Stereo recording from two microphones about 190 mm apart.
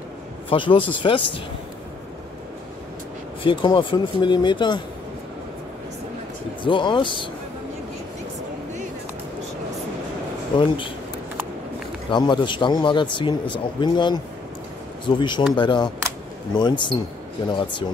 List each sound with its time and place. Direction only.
0.5 s speech: 25° left (ahead or behind)
3.4 s speech: 25° left (ahead or behind)
6.6 s speech: 25° left (ahead or behind)
10.5 s speech: 25° left (ahead or behind)
12.1 s speech: 25° left (ahead or behind)